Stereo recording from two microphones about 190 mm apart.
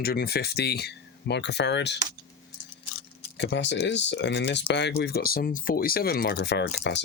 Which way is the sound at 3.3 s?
65° left (ahead or behind).